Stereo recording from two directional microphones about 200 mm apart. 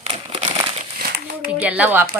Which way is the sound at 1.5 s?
5° right (ahead or behind).